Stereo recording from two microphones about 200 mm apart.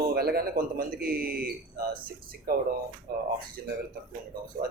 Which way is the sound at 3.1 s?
45° right (ahead or behind).